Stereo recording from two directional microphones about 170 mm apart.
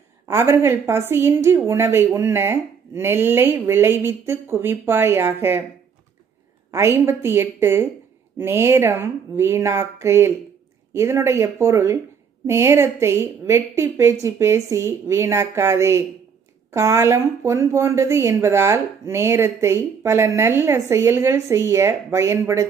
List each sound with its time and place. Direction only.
0.3 s speech: 15° right (ahead or behind)
6.7 s speech: 15° right (ahead or behind)